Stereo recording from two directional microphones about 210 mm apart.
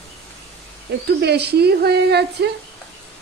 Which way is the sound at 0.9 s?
55° right (ahead or behind).